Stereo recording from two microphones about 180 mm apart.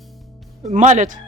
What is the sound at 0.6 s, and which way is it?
Speech, 40° right (ahead or behind).